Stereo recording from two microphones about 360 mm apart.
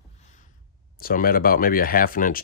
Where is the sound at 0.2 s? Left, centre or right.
Centre.